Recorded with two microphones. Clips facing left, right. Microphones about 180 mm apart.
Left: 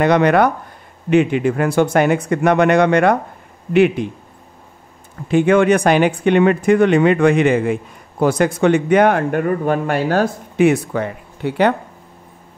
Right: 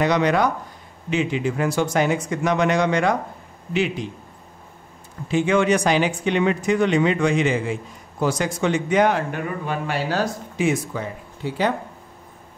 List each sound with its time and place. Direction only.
0.0 s speech: 55° left (ahead or behind)
5.3 s speech: 55° left (ahead or behind)